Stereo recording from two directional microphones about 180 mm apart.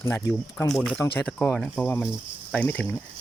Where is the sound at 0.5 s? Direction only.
15° left (ahead or behind).